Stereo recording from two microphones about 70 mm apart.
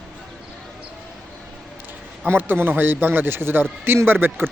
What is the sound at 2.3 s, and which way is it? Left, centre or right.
A man's voice, right.